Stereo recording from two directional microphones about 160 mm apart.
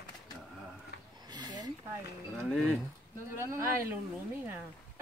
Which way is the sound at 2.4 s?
Centre (ahead or behind).